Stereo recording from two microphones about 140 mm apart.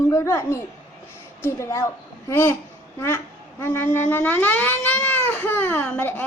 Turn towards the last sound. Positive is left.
turn(degrees=15)  # may be behind; listen again after turning